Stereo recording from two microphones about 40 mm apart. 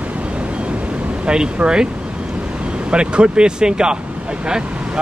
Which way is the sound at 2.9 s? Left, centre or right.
Right.